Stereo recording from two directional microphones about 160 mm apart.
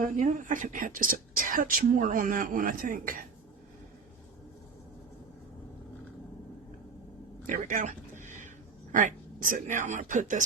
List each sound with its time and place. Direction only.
0.0 s speech: 55° right (ahead or behind)
7.4 s speech: 55° right (ahead or behind)